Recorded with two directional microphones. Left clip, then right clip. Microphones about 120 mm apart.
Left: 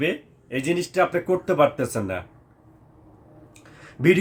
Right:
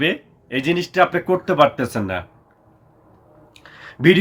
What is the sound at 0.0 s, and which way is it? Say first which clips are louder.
Speech: right 5 dB; 25° left (ahead or behind).